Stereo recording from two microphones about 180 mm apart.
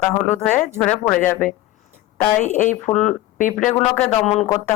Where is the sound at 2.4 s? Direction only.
40° left (ahead or behind).